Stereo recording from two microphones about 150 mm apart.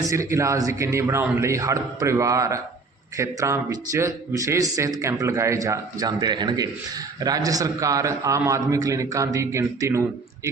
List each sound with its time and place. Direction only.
0.0 s a man's voice: 20° right (ahead or behind)